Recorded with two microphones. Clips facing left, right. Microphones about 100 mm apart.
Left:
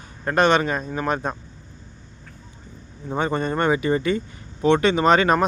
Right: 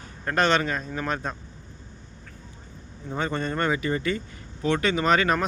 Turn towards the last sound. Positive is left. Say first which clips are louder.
# left 5 dB
turn(degrees=25)  # may be behind; listen again after turning